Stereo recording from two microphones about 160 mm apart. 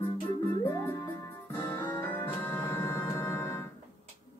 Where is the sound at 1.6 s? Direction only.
15° left (ahead or behind).